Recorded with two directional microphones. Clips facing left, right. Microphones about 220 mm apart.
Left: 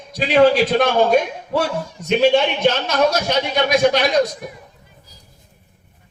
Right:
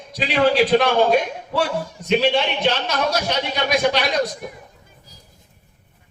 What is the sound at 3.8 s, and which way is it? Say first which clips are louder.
Speech: left 4 dB; 45° left (ahead or behind).